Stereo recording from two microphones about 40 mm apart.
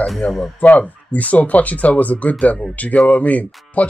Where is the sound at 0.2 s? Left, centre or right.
Left.